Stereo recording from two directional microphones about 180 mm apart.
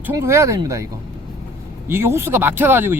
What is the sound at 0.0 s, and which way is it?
Speech, 15° right (ahead or behind).